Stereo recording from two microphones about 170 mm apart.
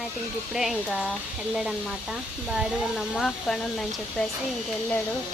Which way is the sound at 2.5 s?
Centre (ahead or behind).